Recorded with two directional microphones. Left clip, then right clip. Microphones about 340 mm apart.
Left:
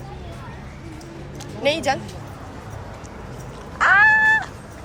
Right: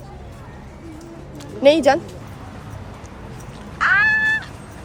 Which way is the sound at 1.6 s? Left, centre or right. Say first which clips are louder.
Right 7 dB; right.